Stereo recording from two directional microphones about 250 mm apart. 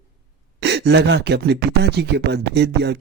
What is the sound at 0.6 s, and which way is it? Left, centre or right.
Speech, right.